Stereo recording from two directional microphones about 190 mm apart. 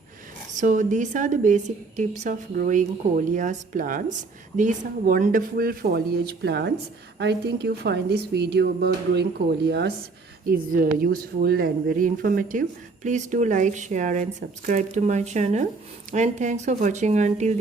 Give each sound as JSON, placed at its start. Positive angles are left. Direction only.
{"t": 0.5, "sound": "a woman's voice", "side_deg": -40}